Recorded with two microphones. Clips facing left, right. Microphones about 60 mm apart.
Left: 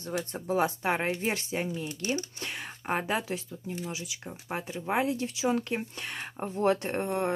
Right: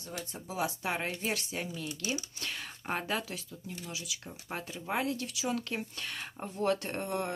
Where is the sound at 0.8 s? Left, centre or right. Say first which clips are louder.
Left 6 dB; left.